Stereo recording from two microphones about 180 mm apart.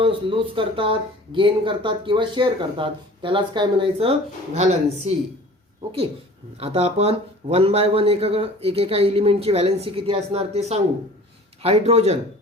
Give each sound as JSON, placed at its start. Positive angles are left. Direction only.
{"t": 0.0, "sound": "speech", "side_deg": -30}
{"t": 6.6, "sound": "speech", "side_deg": -35}